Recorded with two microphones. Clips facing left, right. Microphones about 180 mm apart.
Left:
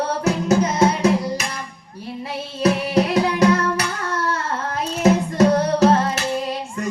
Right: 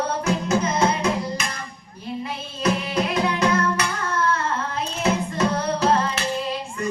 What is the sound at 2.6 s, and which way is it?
Singing, 40° left (ahead or behind).